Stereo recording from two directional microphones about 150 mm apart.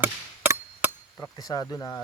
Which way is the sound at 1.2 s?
25° left (ahead or behind).